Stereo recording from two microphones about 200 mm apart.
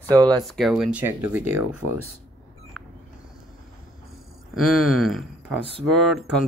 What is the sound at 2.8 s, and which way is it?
Vehicle, centre (ahead or behind).